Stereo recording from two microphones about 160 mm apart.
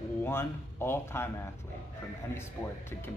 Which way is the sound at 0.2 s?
15° left (ahead or behind).